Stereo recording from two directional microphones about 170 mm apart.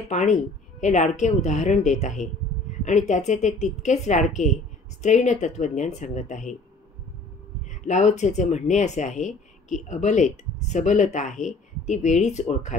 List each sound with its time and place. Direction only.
0.1 s speech: 45° left (ahead or behind)
7.8 s speech: 45° left (ahead or behind)